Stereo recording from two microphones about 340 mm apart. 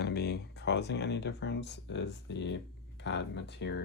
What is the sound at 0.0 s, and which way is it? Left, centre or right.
Speech, left.